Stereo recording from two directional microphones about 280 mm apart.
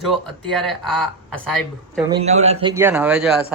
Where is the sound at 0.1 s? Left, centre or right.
Centre.